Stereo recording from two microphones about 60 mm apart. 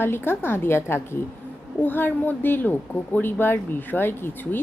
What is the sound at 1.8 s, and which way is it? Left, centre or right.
Speech, left.